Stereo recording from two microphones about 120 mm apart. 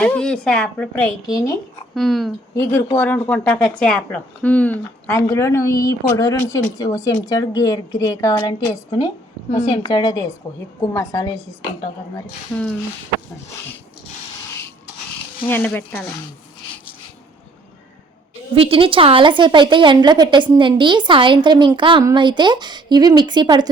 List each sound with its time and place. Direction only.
0.0 s a woman's voice: 10° left (ahead or behind)
2.6 s a woman's voice: 20° left (ahead or behind)
11.3 s a woman's voice: 45° left (ahead or behind)
15.4 s speech: 15° left (ahead or behind)
18.5 s a woman's voice: 50° right (ahead or behind)